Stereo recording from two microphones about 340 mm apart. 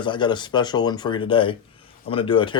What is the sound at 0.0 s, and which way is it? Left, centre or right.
Speech, centre.